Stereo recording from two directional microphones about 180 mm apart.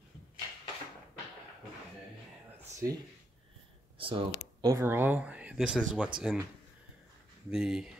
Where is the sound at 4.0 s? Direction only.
25° right (ahead or behind); by 6.1 s 5° right (ahead or behind).